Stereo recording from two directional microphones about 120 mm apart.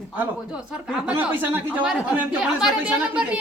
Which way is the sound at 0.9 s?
10° right (ahead or behind).